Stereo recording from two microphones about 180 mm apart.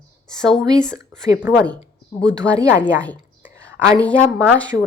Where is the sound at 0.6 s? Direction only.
20° right (ahead or behind).